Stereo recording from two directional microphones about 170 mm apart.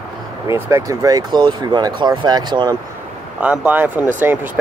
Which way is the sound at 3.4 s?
10° right (ahead or behind).